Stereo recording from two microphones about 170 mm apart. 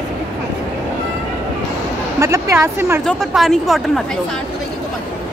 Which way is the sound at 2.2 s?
15° right (ahead or behind).